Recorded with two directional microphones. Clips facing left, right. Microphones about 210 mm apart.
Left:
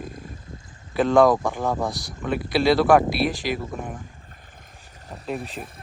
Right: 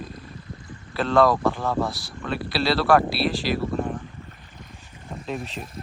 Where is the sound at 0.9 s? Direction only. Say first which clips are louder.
Left 3 dB; 15° left (ahead or behind).